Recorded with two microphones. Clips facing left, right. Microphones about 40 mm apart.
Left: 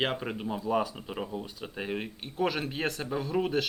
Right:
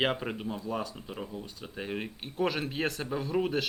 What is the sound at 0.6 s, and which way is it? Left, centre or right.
Speech, centre.